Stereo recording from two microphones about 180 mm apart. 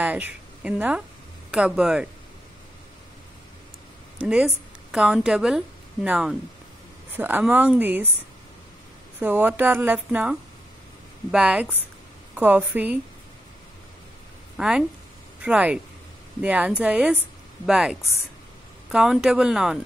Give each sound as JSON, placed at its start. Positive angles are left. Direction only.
{"t": 0.0, "sound": "a woman's voice", "side_deg": -10}
{"t": 4.9, "sound": "speech", "side_deg": -5}
{"t": 9.2, "sound": "speech", "side_deg": -5}
{"t": 11.3, "sound": "speech", "side_deg": -5}
{"t": 14.6, "sound": "speech", "side_deg": -5}